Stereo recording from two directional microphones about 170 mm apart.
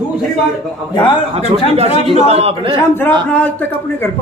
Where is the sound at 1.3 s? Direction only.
35° right (ahead or behind).